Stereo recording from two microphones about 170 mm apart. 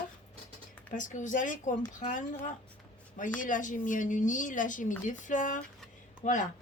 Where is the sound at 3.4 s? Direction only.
50° left (ahead or behind).